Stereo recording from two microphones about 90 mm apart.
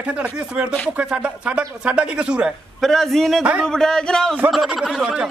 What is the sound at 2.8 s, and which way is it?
A man's voice, 5° left (ahead or behind).